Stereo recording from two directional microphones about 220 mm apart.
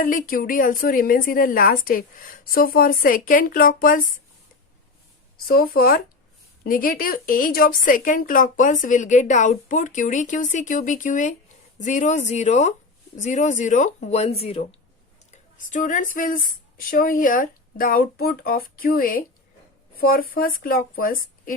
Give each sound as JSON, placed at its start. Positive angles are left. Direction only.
{"t": 0.0, "sound": "a woman's voice", "side_deg": 40}
{"t": 5.5, "sound": "a woman's voice", "side_deg": 45}